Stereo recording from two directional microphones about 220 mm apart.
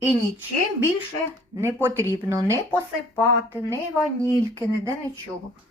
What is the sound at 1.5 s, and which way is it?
Speech, 10° right (ahead or behind).